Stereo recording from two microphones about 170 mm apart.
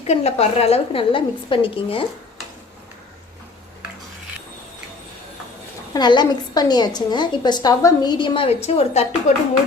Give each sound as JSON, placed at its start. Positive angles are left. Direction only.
{"t": 0.1, "sound": "a woman's voice", "side_deg": 40}
{"t": 5.9, "sound": "a woman's voice", "side_deg": 25}